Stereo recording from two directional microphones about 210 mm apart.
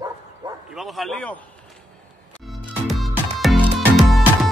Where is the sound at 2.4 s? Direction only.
Centre (ahead or behind).